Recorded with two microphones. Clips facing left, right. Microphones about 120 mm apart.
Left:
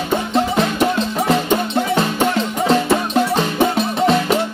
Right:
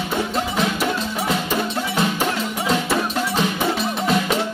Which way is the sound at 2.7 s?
30° left (ahead or behind).